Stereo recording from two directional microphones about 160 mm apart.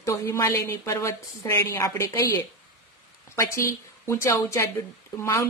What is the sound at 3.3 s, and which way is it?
A woman's voice, 20° left (ahead or behind).